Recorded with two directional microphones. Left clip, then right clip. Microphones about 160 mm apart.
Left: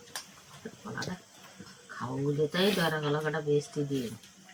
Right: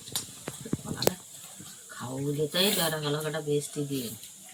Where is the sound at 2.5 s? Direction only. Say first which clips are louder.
Right 4 dB; 5° left (ahead or behind).